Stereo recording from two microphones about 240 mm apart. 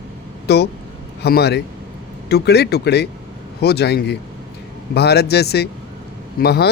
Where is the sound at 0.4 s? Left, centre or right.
Left.